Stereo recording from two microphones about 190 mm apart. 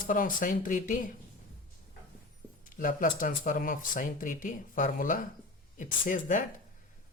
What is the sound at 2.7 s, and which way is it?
Speech, 45° left (ahead or behind).